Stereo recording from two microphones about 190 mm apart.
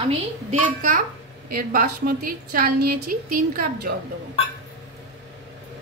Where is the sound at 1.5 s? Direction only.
55° right (ahead or behind).